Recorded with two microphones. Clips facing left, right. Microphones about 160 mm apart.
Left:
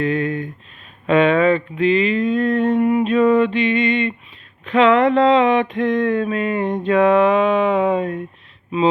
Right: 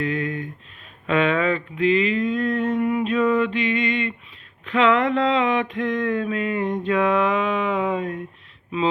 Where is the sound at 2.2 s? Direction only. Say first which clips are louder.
Left 5 dB; 30° left (ahead or behind).